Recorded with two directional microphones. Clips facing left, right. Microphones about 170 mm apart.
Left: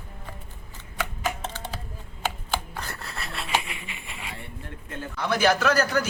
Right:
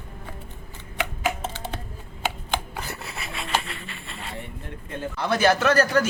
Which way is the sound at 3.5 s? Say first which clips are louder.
Even; 10° left (ahead or behind).